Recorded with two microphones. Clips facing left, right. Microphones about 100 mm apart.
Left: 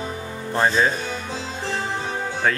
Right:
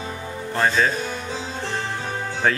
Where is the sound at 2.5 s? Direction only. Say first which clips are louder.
Right 1 dB; centre (ahead or behind).